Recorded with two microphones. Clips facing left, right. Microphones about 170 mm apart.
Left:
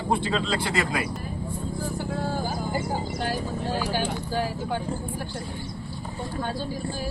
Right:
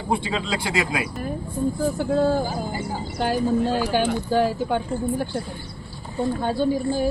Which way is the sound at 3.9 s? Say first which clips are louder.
Right 7 dB; 65° right (ahead or behind).